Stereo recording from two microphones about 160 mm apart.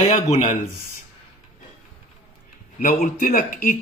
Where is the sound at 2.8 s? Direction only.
55° left (ahead or behind).